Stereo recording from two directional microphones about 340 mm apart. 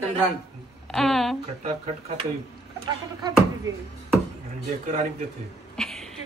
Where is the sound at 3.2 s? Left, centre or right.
Centre.